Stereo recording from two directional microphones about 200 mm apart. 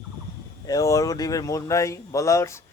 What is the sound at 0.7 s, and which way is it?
Speech, 15° left (ahead or behind).